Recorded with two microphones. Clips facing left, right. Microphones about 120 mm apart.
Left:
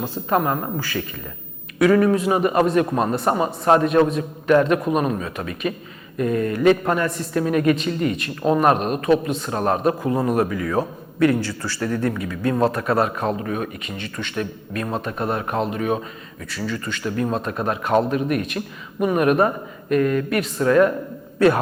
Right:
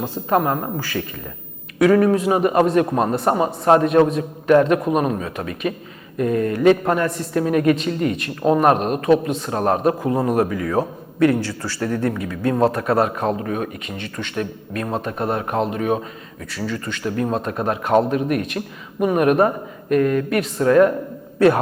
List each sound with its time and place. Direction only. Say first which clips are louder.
0.0 s a man's voice: right 2 dB; 45° right (ahead or behind)
1.8 s a man's voice: right 1 dB; 45° right (ahead or behind)
3.8 s a man's voice: right 2 dB; 50° right (ahead or behind)
20.9 s a sound: right 2 dB; 45° right (ahead or behind)